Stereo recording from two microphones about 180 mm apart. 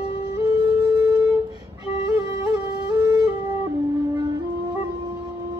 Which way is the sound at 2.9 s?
20° right (ahead or behind).